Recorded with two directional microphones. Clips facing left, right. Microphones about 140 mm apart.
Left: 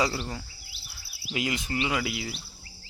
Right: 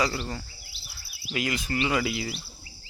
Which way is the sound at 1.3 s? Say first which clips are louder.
Right 1 dB; 20° left (ahead or behind).